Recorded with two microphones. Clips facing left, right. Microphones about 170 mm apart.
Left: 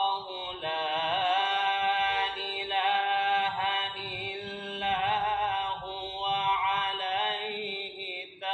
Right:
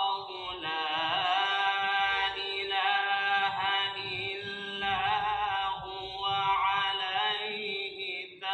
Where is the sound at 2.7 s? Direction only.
30° left (ahead or behind).